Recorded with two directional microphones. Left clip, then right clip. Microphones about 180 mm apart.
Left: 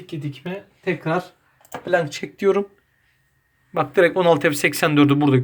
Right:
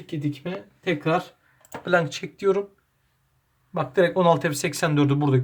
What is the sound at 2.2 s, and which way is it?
Speech, 15° left (ahead or behind).